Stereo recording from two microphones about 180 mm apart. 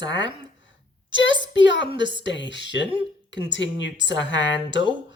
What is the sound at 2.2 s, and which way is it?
Speech, 80° left.